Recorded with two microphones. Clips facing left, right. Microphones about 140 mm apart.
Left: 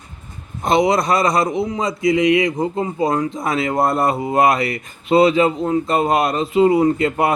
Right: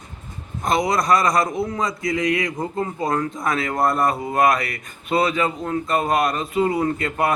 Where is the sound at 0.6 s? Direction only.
25° left (ahead or behind).